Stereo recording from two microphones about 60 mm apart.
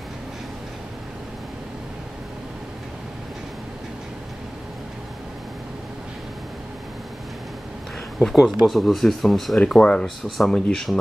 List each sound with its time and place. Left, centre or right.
8.2 s speech: centre
9.7 s speech: centre
10.2 s speech: centre
10.5 s speech: centre